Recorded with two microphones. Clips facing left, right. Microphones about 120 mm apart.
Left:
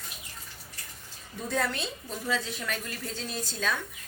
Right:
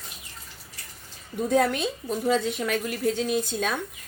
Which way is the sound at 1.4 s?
50° right (ahead or behind).